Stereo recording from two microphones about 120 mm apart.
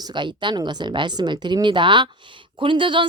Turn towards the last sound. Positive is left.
turn(degrees=-45)  # may be behind; listen again after turning